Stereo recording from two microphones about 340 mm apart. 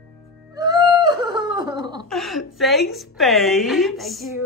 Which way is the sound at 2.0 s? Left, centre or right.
Centre.